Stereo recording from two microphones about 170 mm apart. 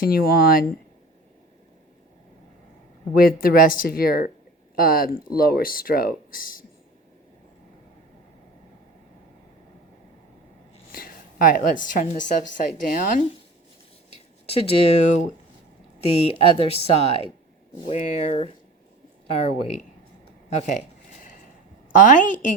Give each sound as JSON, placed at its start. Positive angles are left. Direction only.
{"t": 0.0, "sound": "speech", "side_deg": 60}
{"t": 3.2, "sound": "speech", "side_deg": 60}
{"t": 10.9, "sound": "a woman's voice", "side_deg": 55}
{"t": 14.4, "sound": "speech", "side_deg": 35}
{"t": 16.2, "sound": "a woman's voice", "side_deg": 35}
{"t": 21.9, "sound": "a woman's voice", "side_deg": 50}